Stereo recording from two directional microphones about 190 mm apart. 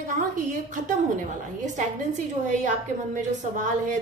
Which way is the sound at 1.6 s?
40° right (ahead or behind).